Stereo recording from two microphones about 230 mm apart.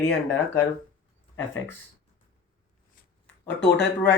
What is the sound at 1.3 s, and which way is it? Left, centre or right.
Speech, centre.